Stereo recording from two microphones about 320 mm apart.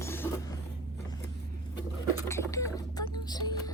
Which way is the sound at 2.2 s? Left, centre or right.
Centre.